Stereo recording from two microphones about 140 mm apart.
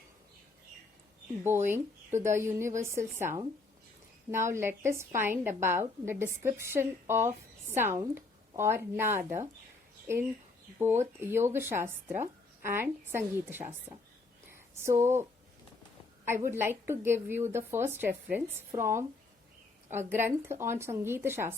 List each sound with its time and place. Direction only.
1.5 s a woman's voice: 15° right (ahead or behind)
15.0 s a woman's voice: 20° right (ahead or behind)